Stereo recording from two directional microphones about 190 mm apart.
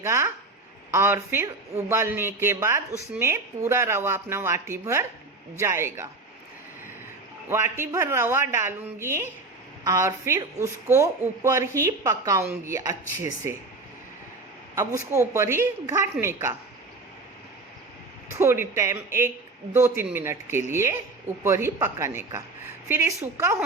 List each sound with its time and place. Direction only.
0.0 s a woman's voice: 15° right (ahead or behind)
7.4 s a woman's voice: 10° right (ahead or behind)
14.8 s a woman's voice: 15° right (ahead or behind)
18.3 s a woman's voice: 10° right (ahead or behind)